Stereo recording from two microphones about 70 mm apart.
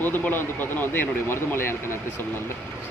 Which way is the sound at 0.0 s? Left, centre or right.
Left.